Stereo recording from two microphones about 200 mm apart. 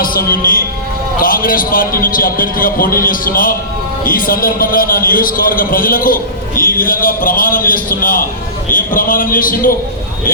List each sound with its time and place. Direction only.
0.0 s a man's voice: 45° left (ahead or behind)